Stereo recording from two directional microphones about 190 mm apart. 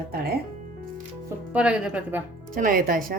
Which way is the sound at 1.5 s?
5° right (ahead or behind).